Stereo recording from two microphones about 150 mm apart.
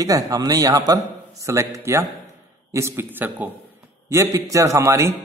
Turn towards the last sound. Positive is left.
turn(degrees=-20)  # may be behind; listen again after turning